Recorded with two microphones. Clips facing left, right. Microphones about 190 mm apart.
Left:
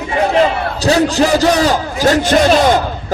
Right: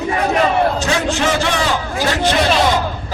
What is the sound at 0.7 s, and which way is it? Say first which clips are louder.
A man's voice: left 6 dB; 35° left (ahead or behind).